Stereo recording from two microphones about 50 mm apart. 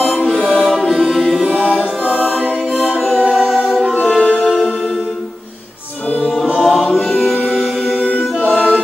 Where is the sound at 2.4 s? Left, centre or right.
Right.